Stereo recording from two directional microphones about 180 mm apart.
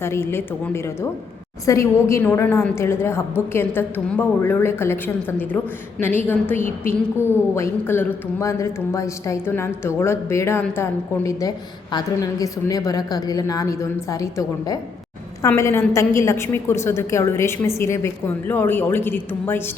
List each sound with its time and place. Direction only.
0.0 s a woman's voice: 15° left (ahead or behind)